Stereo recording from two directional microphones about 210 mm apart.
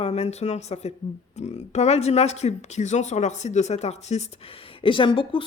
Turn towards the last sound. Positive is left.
turn(degrees=25)  # may be behind; listen again after turning